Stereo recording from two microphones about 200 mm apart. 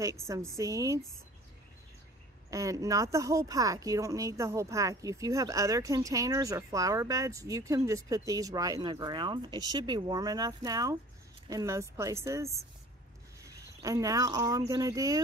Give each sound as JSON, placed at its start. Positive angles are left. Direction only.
{"t": 0.0, "sound": "speech", "side_deg": -15}
{"t": 2.5, "sound": "speech", "side_deg": -15}
{"t": 13.7, "sound": "speech", "side_deg": -15}